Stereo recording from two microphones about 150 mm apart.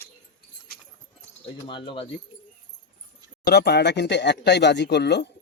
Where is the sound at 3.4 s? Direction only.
90° left.